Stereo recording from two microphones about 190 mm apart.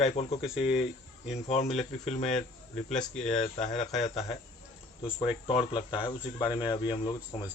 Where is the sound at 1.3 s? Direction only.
35° left (ahead or behind).